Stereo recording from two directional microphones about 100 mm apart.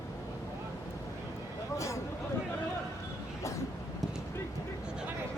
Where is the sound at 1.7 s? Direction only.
30° left (ahead or behind).